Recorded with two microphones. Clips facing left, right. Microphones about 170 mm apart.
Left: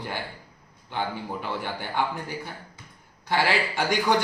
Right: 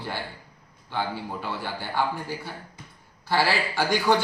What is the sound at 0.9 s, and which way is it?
A man's voice, 15° left (ahead or behind).